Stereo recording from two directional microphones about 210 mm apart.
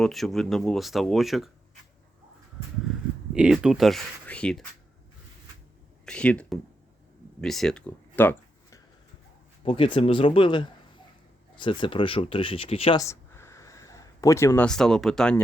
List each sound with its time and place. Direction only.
0.0 s speech: centre (ahead or behind)
3.3 s speech: 5° right (ahead or behind)
6.1 s speech: 5° left (ahead or behind)
9.6 s speech: 25° left (ahead or behind); by 15.4 s centre (ahead or behind)